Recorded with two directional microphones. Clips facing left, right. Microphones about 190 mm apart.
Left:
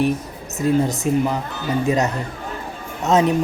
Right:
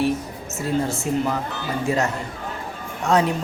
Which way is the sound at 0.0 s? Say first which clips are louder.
Left 2 dB; 20° left (ahead or behind).